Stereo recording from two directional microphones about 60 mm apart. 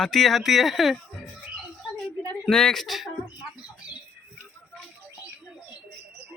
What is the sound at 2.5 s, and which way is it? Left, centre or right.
Speech, centre.